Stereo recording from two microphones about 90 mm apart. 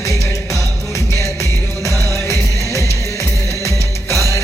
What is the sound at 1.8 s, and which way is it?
Music, 35° left (ahead or behind).